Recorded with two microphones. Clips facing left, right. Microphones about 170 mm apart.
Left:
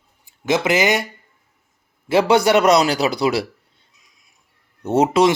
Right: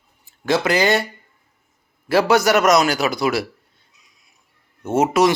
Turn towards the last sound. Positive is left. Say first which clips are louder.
# left 1 dB
turn(degrees=30)  # may be behind; listen again after turning